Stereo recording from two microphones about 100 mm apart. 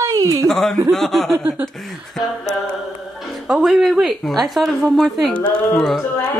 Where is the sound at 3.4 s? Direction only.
5° right (ahead or behind).